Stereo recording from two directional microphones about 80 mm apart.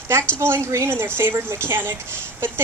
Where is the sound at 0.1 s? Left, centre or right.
Right.